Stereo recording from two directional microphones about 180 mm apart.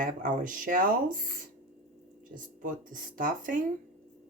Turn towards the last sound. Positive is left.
turn(degrees=-50)  # may be behind; listen again after turning